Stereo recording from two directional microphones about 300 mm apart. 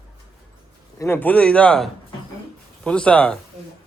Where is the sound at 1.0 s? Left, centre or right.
Centre.